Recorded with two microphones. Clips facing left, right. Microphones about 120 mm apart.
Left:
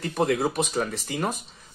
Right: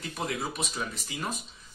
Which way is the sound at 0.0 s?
55° left (ahead or behind).